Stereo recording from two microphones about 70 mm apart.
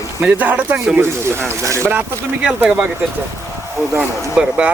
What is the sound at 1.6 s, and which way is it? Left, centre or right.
Speech, right.